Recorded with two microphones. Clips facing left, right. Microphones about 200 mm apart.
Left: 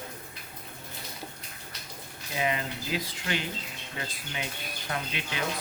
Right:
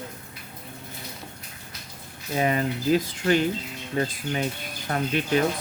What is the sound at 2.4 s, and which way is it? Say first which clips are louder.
Speech: right 6 dB; 45° right (ahead or behind).